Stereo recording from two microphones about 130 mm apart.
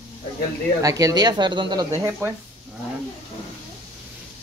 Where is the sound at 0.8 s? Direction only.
25° right (ahead or behind).